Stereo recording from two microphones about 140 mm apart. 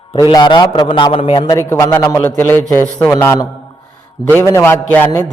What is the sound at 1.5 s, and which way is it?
A man's voice, 20° left (ahead or behind).